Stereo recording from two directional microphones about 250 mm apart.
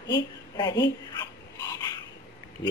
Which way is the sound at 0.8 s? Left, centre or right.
Centre.